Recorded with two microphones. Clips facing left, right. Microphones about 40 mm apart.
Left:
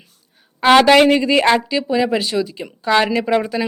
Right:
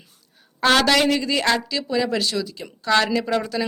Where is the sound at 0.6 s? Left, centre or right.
Left.